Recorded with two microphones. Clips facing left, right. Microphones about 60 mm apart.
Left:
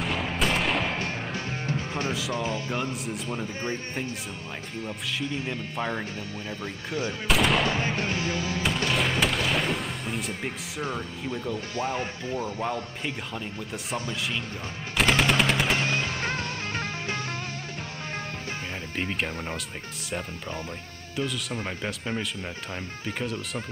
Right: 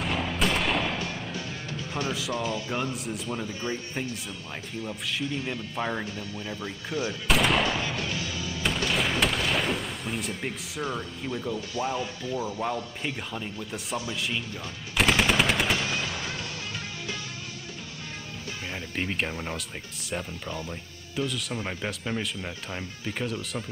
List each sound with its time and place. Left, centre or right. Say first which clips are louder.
0.0 s a sound: even; centre
1.7 s music: left 1 dB; left
2.3 s speech: right 1 dB; left
2.7 s speech: even; centre
5.5 s speech: even; centre
7.8 s music: left 3 dB; left
8.6 s artillery fire: even; centre
11.7 s music: even; left
13.0 s speech: even; centre
15.0 s machine gun: even; centre
15.8 s music: left 3 dB; left
18.9 s speech: even; centre
21.3 s speech: even; centre